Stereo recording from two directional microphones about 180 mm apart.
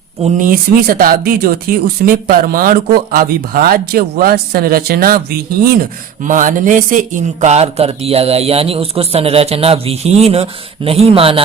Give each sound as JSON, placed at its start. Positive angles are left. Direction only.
{"t": 0.2, "sound": "speech", "side_deg": -45}
{"t": 6.2, "sound": "a man's voice", "side_deg": -45}